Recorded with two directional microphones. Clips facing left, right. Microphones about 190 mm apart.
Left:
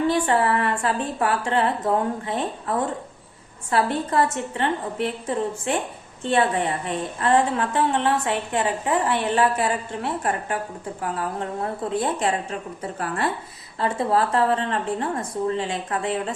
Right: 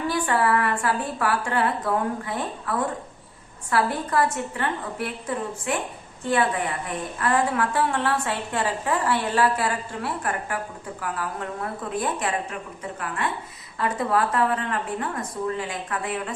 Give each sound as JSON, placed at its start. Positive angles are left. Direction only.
{"t": 0.1, "sound": "a woman's voice", "side_deg": 25}
{"t": 13.7, "sound": "a woman's voice", "side_deg": 30}